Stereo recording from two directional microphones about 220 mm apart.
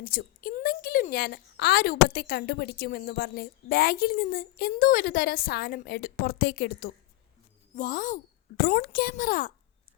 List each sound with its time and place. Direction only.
0.0 s a woman's voice: 40° left (ahead or behind)